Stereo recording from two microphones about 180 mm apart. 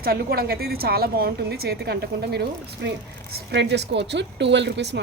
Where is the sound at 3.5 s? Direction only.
70° right (ahead or behind).